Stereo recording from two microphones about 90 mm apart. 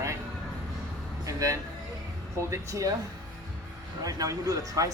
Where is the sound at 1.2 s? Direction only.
40° right (ahead or behind).